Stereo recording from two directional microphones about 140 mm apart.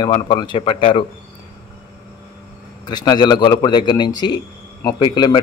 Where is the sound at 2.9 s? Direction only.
30° left (ahead or behind).